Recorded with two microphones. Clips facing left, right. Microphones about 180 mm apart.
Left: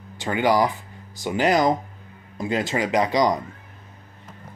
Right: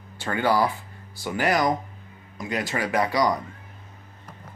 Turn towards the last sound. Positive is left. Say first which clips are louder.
# left 3 dB
turn(degrees=20)  # may be behind; listen again after turning